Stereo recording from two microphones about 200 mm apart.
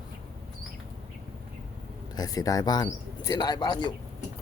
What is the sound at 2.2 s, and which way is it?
Speech, 20° left (ahead or behind).